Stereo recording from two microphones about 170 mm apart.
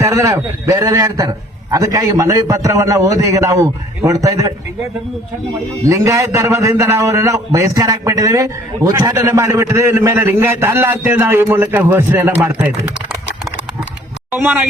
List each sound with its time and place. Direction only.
0.0 s a man's voice: 15° right (ahead or behind)
5.8 s a man's voice: 20° right (ahead or behind)
14.3 s a man's voice: 10° right (ahead or behind)